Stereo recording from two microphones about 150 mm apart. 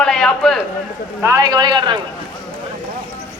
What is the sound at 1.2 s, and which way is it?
Speech, 20° right (ahead or behind).